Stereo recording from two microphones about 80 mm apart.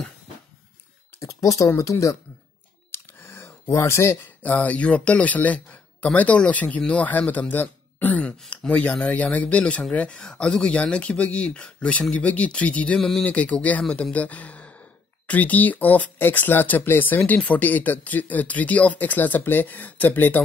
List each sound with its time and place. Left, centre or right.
1.2 s speech: left
2.9 s a sound: left
4.4 s a man's voice: centre